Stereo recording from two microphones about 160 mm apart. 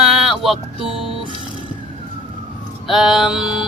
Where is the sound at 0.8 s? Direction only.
35° right (ahead or behind).